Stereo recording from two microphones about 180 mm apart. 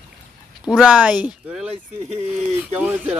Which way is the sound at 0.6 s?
5° right (ahead or behind).